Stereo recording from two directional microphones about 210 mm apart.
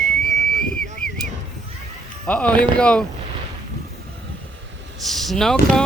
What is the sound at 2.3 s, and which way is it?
Speech, 5° left (ahead or behind).